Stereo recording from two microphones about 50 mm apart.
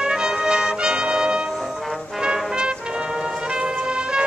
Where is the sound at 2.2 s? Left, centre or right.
Centre.